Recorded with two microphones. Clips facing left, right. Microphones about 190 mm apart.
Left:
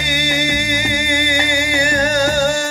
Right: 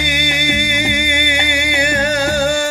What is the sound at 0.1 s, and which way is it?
Music, 60° right (ahead or behind).